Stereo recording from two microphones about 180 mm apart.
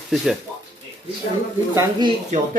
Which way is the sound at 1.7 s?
20° right (ahead or behind).